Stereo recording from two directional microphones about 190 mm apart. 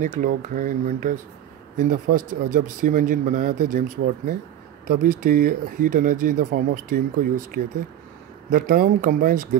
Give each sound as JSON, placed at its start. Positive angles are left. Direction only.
{"t": 0.0, "sound": "speech", "side_deg": -45}
{"t": 4.8, "sound": "speech", "side_deg": -50}